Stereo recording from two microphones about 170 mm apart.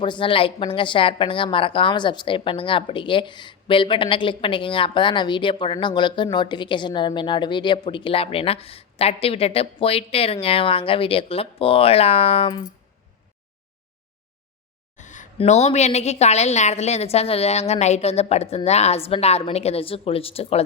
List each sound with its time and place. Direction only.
0.0 s a woman's voice: 30° left (ahead or behind)
14.9 s a sound: 45° left (ahead or behind)
15.4 s a woman's voice: 40° left (ahead or behind)